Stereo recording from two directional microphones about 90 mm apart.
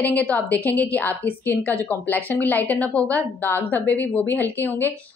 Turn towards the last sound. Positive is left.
turn(degrees=20)  # may be behind; listen again after turning